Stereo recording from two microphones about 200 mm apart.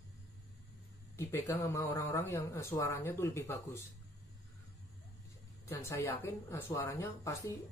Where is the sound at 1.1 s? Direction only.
10° left (ahead or behind).